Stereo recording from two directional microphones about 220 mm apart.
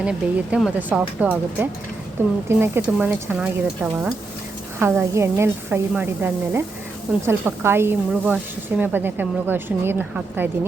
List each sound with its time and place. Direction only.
0.0 s speech: 5° right (ahead or behind)
4.8 s speech: 10° right (ahead or behind)